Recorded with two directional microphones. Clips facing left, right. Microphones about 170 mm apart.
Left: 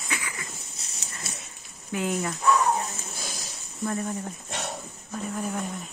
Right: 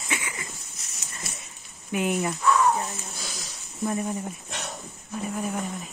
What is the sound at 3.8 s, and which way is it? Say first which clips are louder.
A woman's voice: right 2 dB; 15° right (ahead or behind).